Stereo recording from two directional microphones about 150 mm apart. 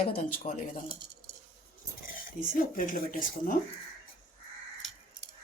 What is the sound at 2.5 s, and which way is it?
Speech, 65° left (ahead or behind).